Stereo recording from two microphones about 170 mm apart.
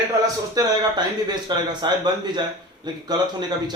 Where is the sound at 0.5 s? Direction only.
25° right (ahead or behind).